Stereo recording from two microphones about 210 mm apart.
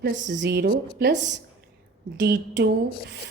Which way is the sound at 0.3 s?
55° right (ahead or behind).